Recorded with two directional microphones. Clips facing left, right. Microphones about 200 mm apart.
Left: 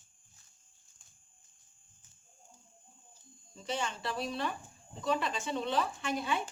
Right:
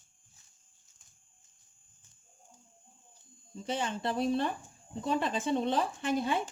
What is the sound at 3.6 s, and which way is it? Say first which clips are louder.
Speech: right 3 dB; 55° right (ahead or behind).